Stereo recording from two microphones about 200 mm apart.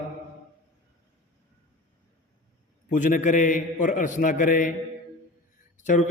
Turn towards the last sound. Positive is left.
turn(degrees=40)  # may be behind; listen again after turning